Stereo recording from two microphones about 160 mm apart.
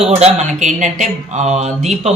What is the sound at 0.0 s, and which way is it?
Speech, 40° right (ahead or behind).